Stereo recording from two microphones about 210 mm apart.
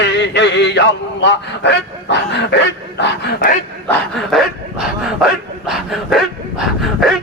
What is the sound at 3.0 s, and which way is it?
Speech, 50° left (ahead or behind).